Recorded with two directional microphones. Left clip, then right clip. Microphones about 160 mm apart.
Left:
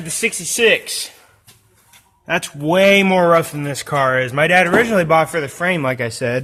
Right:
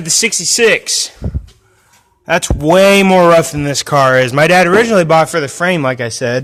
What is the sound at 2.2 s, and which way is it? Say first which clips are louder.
Speech: right 7 dB; 35° right (ahead or behind).